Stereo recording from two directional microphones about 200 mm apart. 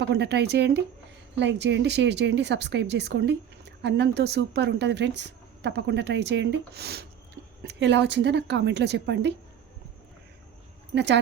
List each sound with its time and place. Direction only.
0.1 s a woman's voice: 60° right (ahead or behind)
10.9 s a woman's voice: 60° right (ahead or behind)